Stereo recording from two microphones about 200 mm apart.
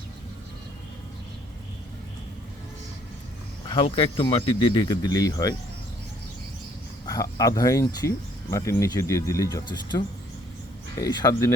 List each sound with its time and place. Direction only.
3.7 s speech: 25° left (ahead or behind)
7.1 s speech: 15° left (ahead or behind)
11.0 s speech: 20° left (ahead or behind)